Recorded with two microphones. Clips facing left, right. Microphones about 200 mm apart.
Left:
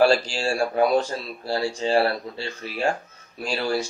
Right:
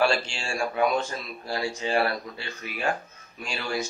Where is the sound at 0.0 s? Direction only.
35° left (ahead or behind).